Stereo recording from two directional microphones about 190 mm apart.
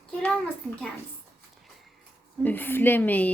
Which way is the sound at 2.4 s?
10° left (ahead or behind).